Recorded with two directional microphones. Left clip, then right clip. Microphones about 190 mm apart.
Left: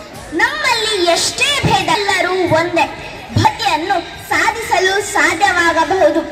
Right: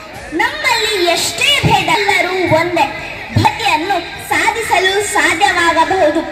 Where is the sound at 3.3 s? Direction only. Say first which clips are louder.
Right 1 dB; 5° right (ahead or behind).